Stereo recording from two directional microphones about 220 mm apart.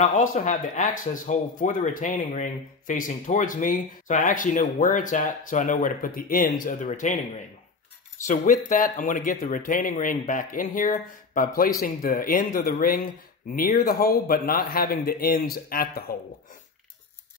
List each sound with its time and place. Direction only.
0.0 s speech: 35° left (ahead or behind)
8.6 s speech: 35° left (ahead or behind)